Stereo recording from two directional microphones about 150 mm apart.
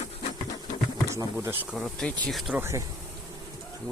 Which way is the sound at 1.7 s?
Centre (ahead or behind).